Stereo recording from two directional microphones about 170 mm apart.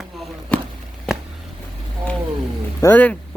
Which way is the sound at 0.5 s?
5° left (ahead or behind).